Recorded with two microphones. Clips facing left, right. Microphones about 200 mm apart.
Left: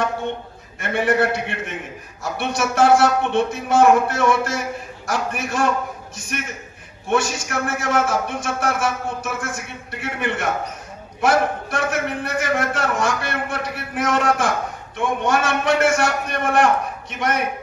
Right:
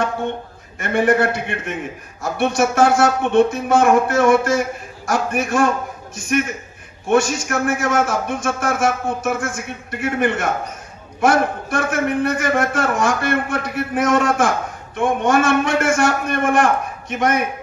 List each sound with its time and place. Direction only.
0.7 s a man's voice: 50° right (ahead or behind)